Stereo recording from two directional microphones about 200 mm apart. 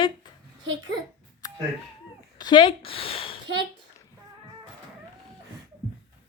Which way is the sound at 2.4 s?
25° left (ahead or behind).